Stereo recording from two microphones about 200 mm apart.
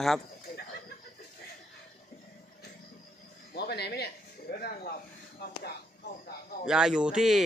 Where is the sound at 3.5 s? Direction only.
55° left (ahead or behind).